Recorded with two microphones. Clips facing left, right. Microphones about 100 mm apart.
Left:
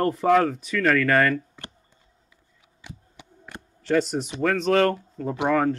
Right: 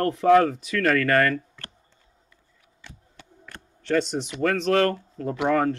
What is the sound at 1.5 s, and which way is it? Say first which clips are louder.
Clicking: left 2 dB; 20° left (ahead or behind).